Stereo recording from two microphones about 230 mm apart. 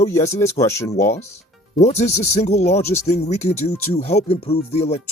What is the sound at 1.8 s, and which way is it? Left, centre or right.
Speech, left.